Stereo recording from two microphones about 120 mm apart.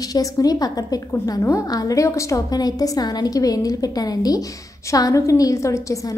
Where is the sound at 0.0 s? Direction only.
30° left (ahead or behind).